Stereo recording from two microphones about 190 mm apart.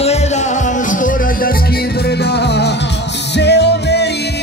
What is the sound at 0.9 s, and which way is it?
Music, 45° left (ahead or behind).